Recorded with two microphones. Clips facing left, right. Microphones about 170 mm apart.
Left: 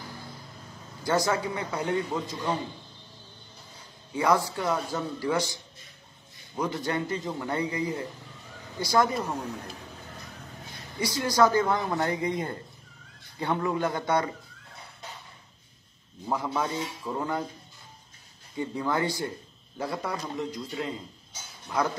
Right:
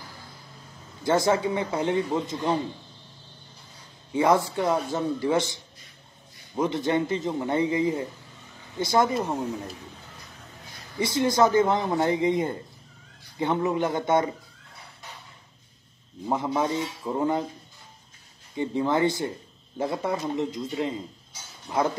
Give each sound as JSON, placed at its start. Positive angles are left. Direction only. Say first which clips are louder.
{"t": 1.0, "sound": "a man's voice", "louder": "right 4 dB", "side_deg": -25}
{"t": 4.1, "sound": "a man's voice", "louder": "right 3 dB", "side_deg": -25}
{"t": 11.0, "sound": "a man's voice", "louder": "right 2 dB", "side_deg": -25}
{"t": 16.3, "sound": "a man's voice", "louder": "right 4 dB", "side_deg": -20}
{"t": 18.6, "sound": "a man's voice", "louder": "right 5 dB", "side_deg": -25}